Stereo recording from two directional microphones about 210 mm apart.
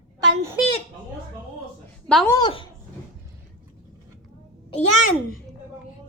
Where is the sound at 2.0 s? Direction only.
5° left (ahead or behind).